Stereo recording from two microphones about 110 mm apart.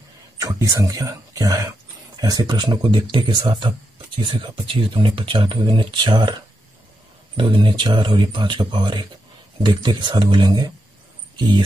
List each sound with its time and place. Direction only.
0.4 s speech: 35° right (ahead or behind)
7.3 s speech: 50° right (ahead or behind)